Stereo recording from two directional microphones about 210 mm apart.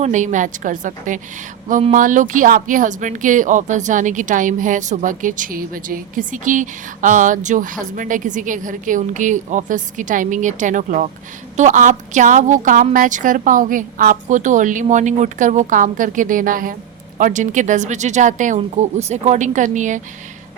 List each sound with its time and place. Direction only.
0.0 s speech: 35° right (ahead or behind)